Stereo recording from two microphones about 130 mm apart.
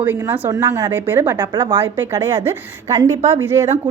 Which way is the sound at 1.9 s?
15° right (ahead or behind).